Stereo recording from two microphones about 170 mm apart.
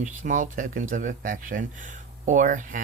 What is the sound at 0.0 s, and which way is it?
Speech, 50° right (ahead or behind).